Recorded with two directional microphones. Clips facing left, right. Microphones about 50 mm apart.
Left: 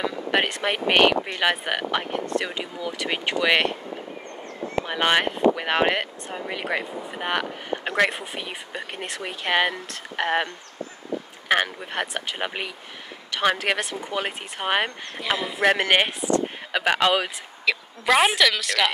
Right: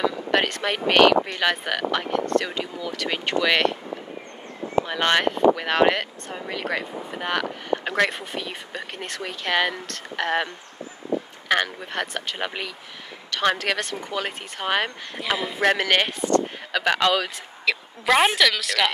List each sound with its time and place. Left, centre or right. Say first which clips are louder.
0.3 s speech: left 2 dB; centre
4.8 s speech: left 2 dB; centre
15.1 s a woman's voice: even; centre
15.8 s speech: left 1 dB; centre
17.6 s a woman's voice: even; centre